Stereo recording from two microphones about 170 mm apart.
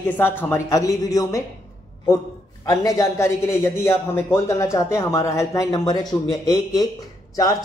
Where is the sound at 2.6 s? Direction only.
20° left (ahead or behind).